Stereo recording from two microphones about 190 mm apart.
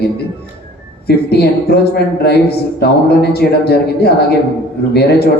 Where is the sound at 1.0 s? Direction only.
55° left (ahead or behind).